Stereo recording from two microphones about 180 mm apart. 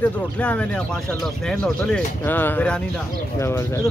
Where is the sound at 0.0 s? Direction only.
5° left (ahead or behind).